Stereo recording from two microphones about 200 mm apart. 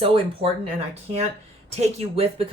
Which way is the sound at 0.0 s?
30° right (ahead or behind).